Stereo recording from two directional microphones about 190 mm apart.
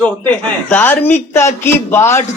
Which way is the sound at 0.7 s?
10° left (ahead or behind).